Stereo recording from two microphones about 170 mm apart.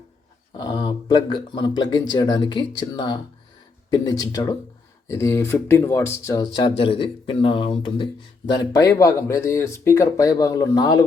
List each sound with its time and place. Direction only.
0.5 s speech: 25° left (ahead or behind)